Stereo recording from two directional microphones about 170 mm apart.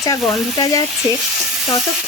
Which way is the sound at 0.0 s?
20° left (ahead or behind).